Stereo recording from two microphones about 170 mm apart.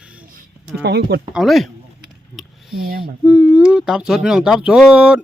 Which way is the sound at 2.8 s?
60° right (ahead or behind).